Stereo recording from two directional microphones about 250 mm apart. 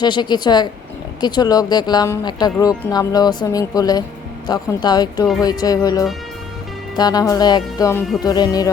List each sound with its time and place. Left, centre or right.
0.0 s speech: centre